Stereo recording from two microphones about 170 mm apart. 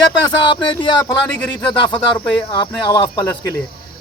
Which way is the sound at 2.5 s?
25° left (ahead or behind).